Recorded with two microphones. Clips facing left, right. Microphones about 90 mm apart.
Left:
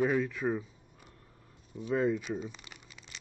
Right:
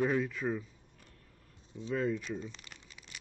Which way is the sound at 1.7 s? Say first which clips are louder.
Left 4 dB; 20° left (ahead or behind).